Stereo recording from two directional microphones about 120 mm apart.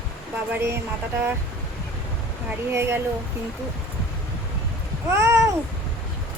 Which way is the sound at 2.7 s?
20° right (ahead or behind).